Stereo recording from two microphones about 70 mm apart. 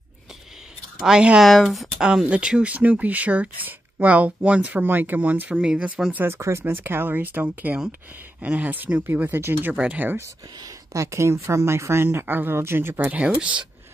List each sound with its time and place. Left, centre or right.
1.0 s speech: centre
1.4 s speech: centre
6.1 s speech: right
10.6 s speech: right
13.2 s speech: centre